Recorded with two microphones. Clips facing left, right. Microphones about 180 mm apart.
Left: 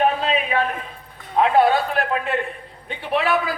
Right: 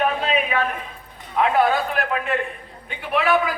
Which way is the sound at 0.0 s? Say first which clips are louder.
Left 1 dB; 30° left (ahead or behind).